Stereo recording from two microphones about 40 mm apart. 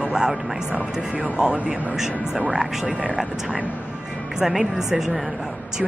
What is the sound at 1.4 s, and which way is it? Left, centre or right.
Speech, right.